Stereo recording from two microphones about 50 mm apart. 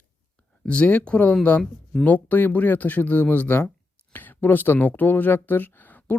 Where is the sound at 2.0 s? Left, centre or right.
Left.